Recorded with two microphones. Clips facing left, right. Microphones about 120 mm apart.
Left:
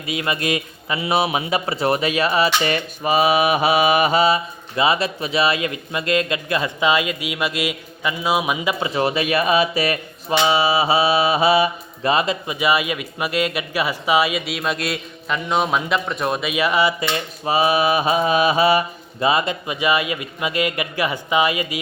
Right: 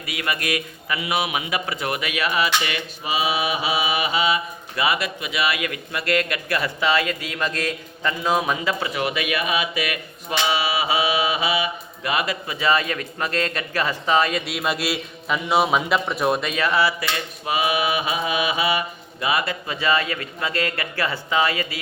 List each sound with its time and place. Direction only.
0.0 s a man's voice: 25° left (ahead or behind); by 4.4 s 40° left (ahead or behind)
4.8 s speech: 30° left (ahead or behind); by 8.7 s 10° left (ahead or behind)
8.8 s a man's voice: 30° left (ahead or behind)
10.4 s mantra: 30° left (ahead or behind)
17.4 s a man's voice: 35° left (ahead or behind)
19.2 s mantra: 25° left (ahead or behind)